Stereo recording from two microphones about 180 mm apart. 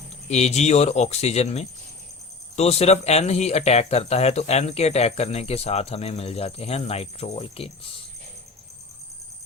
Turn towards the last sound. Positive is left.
turn(degrees=30)  # may be behind; listen again after turning